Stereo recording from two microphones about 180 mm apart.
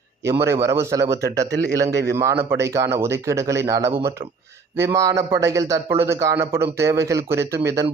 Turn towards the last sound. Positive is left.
turn(degrees=-15)  # may be behind; listen again after turning